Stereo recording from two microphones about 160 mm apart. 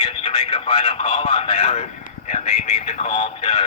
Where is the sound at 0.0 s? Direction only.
40° left (ahead or behind).